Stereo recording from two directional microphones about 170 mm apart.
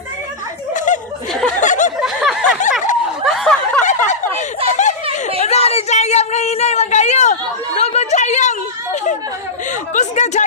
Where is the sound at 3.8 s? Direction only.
45° left (ahead or behind).